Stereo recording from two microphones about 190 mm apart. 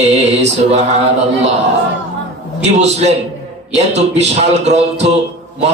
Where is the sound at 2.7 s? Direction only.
35° right (ahead or behind).